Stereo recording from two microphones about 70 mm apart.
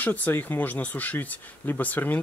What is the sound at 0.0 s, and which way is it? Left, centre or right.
Speech, left.